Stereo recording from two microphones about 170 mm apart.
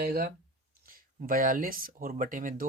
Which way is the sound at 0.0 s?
65° right (ahead or behind).